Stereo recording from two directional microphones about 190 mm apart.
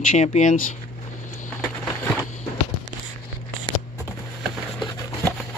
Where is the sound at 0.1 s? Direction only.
40° left (ahead or behind).